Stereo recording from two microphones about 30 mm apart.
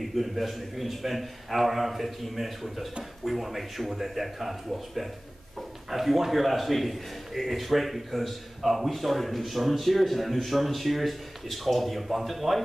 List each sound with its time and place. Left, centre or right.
0.0 s a man's voice: centre